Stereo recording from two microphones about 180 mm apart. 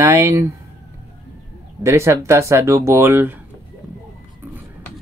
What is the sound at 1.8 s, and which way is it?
Speech, 15° right (ahead or behind).